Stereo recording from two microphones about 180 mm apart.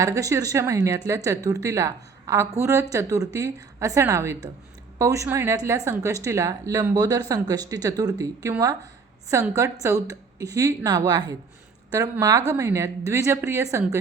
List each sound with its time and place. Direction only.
0.0 s a woman's voice: 20° right (ahead or behind)